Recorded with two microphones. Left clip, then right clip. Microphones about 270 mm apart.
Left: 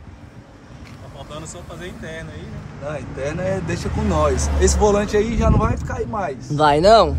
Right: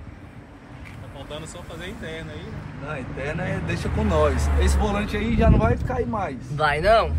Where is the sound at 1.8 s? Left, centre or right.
Left.